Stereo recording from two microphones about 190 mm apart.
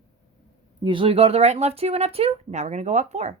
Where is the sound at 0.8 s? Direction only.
25° right (ahead or behind).